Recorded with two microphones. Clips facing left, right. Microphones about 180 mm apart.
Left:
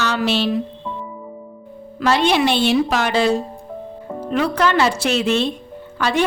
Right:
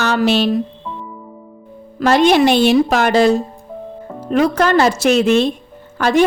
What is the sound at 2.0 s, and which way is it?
A woman's voice, 45° right (ahead or behind).